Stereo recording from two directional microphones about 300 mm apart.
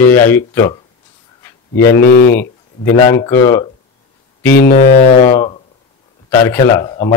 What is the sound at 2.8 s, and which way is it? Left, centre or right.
Speech, centre.